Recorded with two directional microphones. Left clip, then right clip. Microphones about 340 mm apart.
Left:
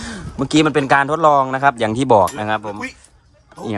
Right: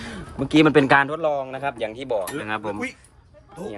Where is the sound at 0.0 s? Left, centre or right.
Centre.